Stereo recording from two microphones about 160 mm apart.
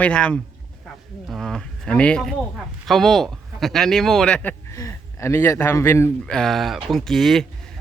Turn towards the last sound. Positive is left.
turn(degrees=0)  # may be behind; listen again after turning